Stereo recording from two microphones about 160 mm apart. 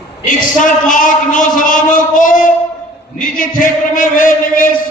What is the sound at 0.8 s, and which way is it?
A man's voice, 55° left (ahead or behind).